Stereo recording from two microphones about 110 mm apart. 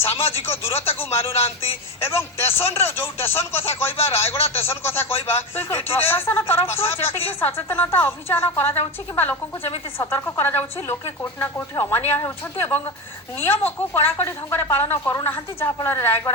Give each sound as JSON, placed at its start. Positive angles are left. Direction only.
{"t": 0.0, "sound": "a woman's voice", "side_deg": 20}